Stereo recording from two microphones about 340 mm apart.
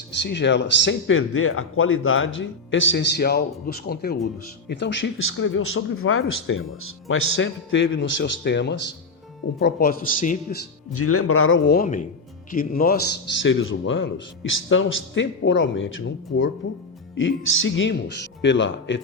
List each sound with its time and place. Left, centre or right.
0.2 s speech: left
10.9 s speech: left